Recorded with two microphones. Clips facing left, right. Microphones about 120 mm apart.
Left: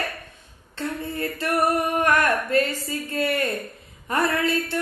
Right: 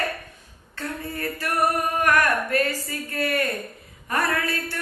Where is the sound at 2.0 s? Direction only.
25° left (ahead or behind).